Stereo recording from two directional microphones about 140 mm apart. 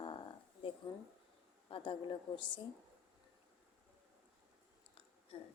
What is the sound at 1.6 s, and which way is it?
Speech, 40° left (ahead or behind).